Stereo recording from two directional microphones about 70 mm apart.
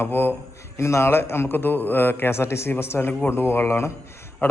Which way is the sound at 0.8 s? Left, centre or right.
Left.